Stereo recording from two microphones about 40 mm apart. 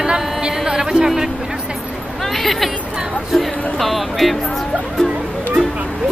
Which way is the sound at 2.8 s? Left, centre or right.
Right.